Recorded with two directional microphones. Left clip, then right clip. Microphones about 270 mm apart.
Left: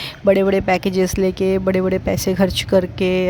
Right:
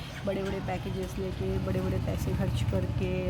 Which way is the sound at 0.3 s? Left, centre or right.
Left.